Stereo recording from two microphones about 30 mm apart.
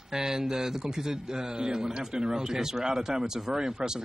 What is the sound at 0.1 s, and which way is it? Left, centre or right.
Speech, centre.